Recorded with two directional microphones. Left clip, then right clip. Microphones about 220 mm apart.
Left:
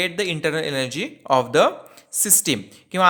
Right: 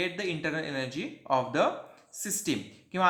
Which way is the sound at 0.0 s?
45° left (ahead or behind).